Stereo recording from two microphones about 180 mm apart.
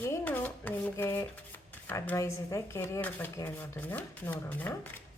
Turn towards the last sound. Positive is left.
turn(degrees=10)  # may be behind; listen again after turning